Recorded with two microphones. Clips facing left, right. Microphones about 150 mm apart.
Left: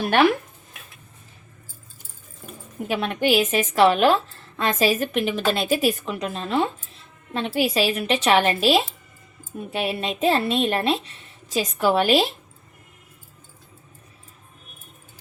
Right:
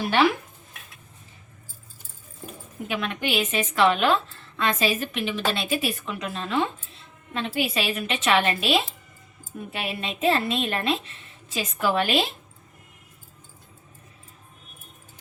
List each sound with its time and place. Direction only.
0.1 s stir: 50° left (ahead or behind)
2.8 s a woman's voice: 35° left (ahead or behind)